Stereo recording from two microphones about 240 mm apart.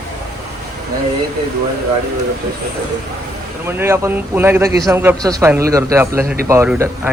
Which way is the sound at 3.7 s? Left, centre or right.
Centre.